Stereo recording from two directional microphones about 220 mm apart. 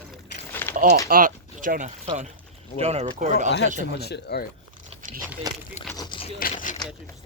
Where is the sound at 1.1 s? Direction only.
40° right (ahead or behind).